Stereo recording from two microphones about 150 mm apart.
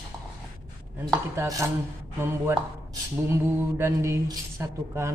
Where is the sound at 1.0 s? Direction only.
25° right (ahead or behind).